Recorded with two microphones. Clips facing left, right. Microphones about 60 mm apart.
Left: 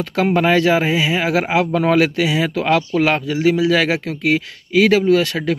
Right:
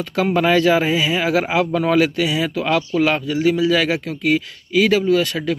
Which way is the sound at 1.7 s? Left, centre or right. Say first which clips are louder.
Left 1 dB; left.